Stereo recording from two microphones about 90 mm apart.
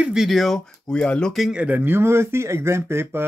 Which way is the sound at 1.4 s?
10° right (ahead or behind).